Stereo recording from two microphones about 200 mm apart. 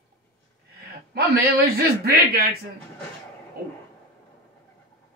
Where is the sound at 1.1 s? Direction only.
50° right (ahead or behind).